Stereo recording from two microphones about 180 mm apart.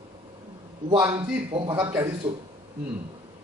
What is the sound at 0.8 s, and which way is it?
Speech, 25° right (ahead or behind).